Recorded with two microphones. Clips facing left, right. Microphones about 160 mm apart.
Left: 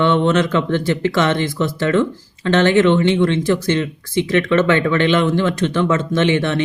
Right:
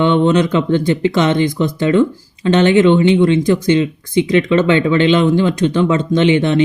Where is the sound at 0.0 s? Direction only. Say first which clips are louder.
Right 3 dB; 15° right (ahead or behind).